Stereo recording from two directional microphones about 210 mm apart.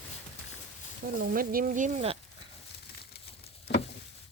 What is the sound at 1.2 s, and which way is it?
Speech, 45° right (ahead or behind).